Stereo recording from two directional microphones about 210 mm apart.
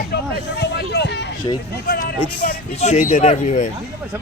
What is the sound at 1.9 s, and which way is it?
Speech, 45° left (ahead or behind).